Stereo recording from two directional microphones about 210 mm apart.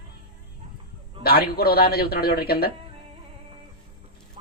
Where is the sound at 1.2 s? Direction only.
45° left (ahead or behind).